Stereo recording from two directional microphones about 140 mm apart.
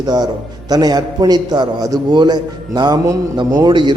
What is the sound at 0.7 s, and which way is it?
A man's voice, 30° right (ahead or behind).